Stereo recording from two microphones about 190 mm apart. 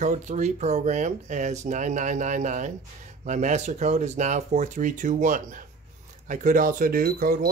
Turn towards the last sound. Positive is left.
turn(degrees=-50)  # may be behind; listen again after turning